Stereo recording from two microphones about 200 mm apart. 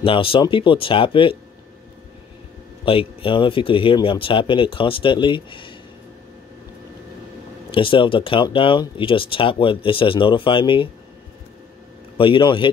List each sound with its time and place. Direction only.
0.0 s speech: 25° left (ahead or behind)
2.8 s speech: 25° left (ahead or behind)
7.7 s speech: 25° left (ahead or behind)
12.2 s speech: 25° left (ahead or behind)